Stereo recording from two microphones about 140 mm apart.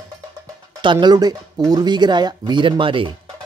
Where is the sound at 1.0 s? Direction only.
30° right (ahead or behind).